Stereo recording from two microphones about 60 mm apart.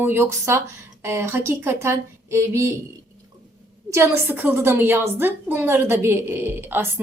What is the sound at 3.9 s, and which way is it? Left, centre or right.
Speech, right.